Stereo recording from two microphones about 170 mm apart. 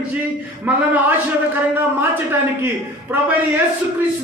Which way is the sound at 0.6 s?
10° right (ahead or behind).